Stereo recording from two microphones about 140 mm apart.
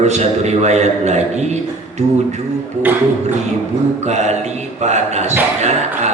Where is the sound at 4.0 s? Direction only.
55° right (ahead or behind).